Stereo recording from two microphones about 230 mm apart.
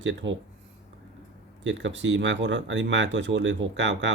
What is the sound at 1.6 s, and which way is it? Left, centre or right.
Speech, right.